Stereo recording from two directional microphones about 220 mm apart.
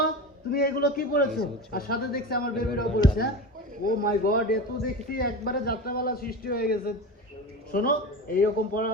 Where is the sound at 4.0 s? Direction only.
45° left (ahead or behind).